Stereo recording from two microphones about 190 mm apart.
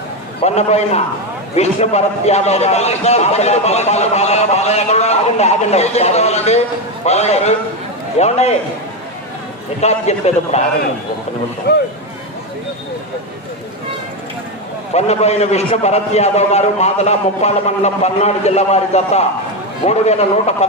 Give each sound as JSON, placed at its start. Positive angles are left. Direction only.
{"t": 0.4, "sound": "a man's voice", "side_deg": 35}
{"t": 9.8, "sound": "a man's voice", "side_deg": 35}
{"t": 11.7, "sound": "speech", "side_deg": 60}
{"t": 14.9, "sound": "a man's voice", "side_deg": 35}